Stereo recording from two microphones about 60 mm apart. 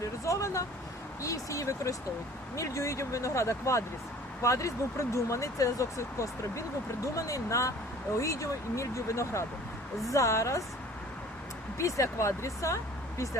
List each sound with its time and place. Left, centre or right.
0.0 s vehicle: left
1.2 s speech: left
11.8 s speech: left